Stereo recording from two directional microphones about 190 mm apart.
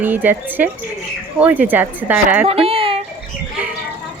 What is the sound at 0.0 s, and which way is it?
A woman's voice, 10° right (ahead or behind).